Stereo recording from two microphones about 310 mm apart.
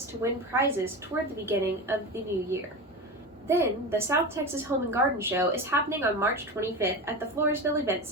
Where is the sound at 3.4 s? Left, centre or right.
Centre.